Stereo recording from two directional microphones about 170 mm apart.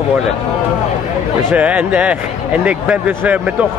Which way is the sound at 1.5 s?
10° right (ahead or behind).